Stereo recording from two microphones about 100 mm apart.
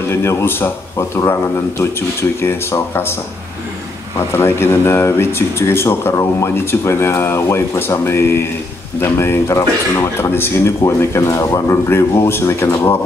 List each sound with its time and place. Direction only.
0.1 s speech: 25° left (ahead or behind)
4.4 s speech: 25° left (ahead or behind)